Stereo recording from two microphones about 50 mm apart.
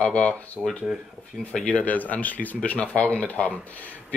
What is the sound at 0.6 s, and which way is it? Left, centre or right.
Speech, centre.